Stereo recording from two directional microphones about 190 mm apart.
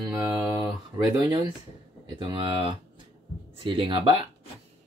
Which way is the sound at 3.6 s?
25° right (ahead or behind).